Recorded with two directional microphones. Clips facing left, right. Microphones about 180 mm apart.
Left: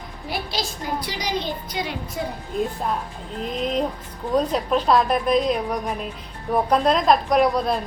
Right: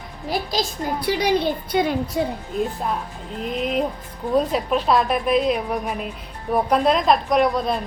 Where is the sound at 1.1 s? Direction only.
55° right (ahead or behind).